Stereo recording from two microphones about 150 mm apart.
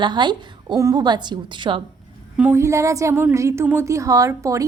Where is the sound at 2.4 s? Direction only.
15° right (ahead or behind).